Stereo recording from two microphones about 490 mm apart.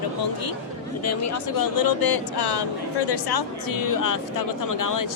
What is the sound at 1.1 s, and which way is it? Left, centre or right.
Speech, left.